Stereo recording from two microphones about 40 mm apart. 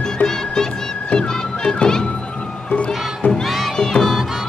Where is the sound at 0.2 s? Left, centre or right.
Left.